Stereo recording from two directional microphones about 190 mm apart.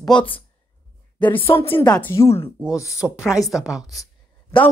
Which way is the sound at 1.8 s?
10° left (ahead or behind).